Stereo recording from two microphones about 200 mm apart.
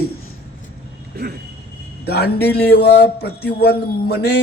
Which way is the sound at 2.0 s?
55° left (ahead or behind).